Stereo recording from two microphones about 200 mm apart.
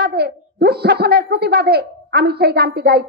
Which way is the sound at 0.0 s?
55° right (ahead or behind).